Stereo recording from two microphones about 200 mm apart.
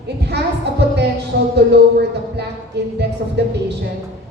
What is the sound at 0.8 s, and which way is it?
A woman's voice, 55° right (ahead or behind).